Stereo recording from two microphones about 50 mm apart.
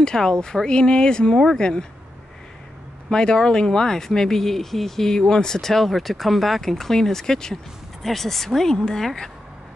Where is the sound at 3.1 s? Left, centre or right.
Centre.